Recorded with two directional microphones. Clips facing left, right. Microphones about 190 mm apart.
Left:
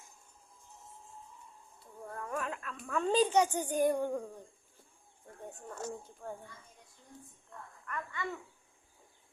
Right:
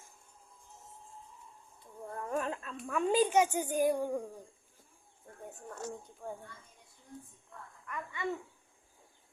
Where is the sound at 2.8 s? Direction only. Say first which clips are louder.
Even; 10° right (ahead or behind).